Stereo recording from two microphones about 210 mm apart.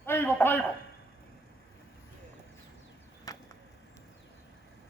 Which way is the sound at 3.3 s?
15° left (ahead or behind).